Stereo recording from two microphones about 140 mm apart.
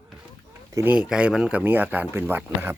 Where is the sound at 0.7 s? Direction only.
15° right (ahead or behind).